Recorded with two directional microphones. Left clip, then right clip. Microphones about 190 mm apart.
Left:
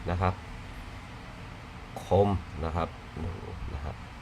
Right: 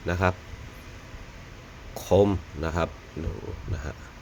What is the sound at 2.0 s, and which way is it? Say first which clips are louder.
Speech: right 4 dB; 25° right (ahead or behind).